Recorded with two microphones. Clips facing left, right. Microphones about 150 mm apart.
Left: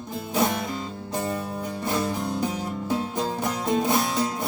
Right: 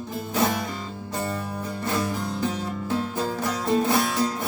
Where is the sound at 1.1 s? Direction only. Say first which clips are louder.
Left 1 dB; 15° left (ahead or behind).